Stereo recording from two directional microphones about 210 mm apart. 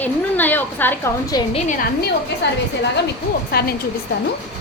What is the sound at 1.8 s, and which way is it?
Speech, 50° left (ahead or behind).